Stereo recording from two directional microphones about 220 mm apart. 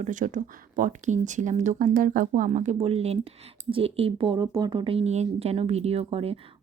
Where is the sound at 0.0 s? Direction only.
35° right (ahead or behind).